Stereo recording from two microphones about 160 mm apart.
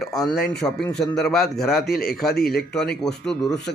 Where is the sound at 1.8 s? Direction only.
75° left (ahead or behind).